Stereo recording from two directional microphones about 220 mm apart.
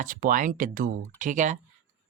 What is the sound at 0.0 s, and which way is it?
Speech, 40° right (ahead or behind).